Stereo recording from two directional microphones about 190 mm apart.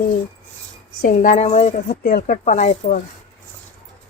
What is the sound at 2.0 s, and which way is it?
Speech, 45° left (ahead or behind).